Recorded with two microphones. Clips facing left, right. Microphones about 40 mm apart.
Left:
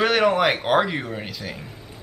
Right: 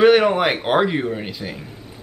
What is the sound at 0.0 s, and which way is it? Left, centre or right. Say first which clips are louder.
Speech: right 5 dB; centre.